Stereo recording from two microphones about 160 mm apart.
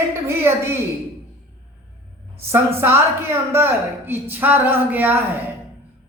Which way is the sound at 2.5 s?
15° right (ahead or behind).